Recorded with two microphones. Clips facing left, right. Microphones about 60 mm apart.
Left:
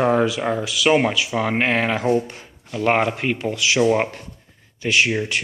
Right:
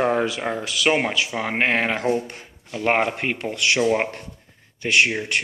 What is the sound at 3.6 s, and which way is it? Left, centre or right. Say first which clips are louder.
Speech: left 2 dB; right.